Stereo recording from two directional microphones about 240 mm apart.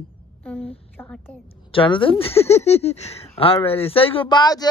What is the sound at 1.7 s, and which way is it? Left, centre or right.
Speech, left.